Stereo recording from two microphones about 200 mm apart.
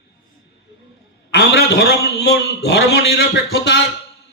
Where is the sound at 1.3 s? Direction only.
55° left (ahead or behind).